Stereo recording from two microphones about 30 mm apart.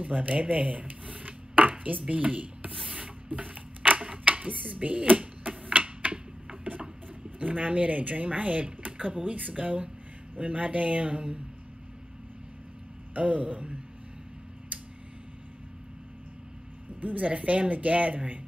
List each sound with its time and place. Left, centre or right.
0.0 s chopping: right
3.3 s a sound: right
4.1 s a sound: right
4.7 s speech: right
5.7 s music: right
7.3 s speech: right
13.1 s speech: right
14.7 s tick-tock: right
17.2 s speech: right